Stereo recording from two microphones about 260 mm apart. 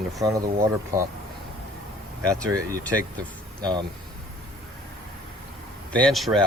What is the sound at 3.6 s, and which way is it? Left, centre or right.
Speech, centre.